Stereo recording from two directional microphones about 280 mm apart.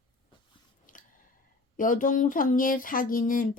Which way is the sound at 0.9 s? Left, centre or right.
Left.